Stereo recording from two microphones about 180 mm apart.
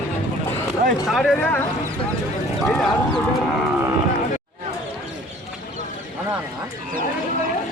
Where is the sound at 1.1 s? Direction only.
Centre (ahead or behind).